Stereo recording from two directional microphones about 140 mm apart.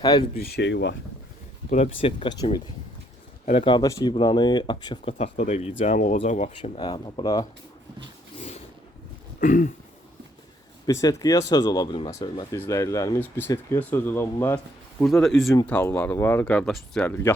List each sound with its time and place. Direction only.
0.0 s speech: 30° left (ahead or behind)
1.7 s speech: 45° left (ahead or behind)
3.4 s speech: 60° left (ahead or behind)
3.7 s speech: 30° left (ahead or behind)
5.1 s speech: 50° left (ahead or behind)
6.7 s speech: 35° left (ahead or behind)
8.4 s a sound: 50° left (ahead or behind)
9.4 s throat clearing: 70° left (ahead or behind)
10.8 s speech: 25° left (ahead or behind)
12.5 s speech: 20° left (ahead or behind); by 15.5 s centre (ahead or behind)
15.6 s speech: 10° left (ahead or behind)